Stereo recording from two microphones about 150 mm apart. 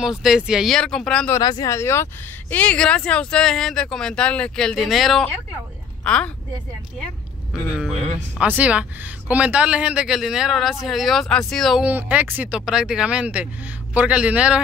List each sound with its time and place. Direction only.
0.0 s speech: 5° right (ahead or behind)
1.3 s a woman's voice: 25° left (ahead or behind); by 6.3 s 5° left (ahead or behind)
8.4 s speech: 10° right (ahead or behind)